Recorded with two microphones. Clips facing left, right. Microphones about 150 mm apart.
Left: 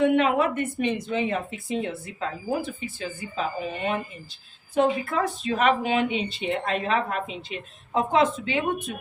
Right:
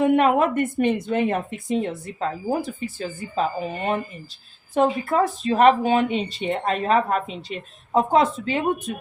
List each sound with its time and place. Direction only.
0.0 s a woman's voice: 45° right (ahead or behind)